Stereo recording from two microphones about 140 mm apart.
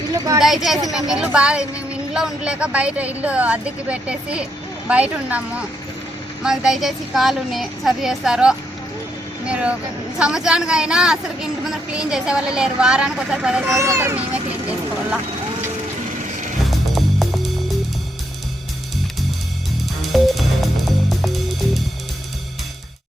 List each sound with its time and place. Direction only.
0.3 s a woman's voice: centre (ahead or behind)
13.7 s a child's voice: 20° right (ahead or behind)
16.6 s music: centre (ahead or behind)
20.0 s music: centre (ahead or behind)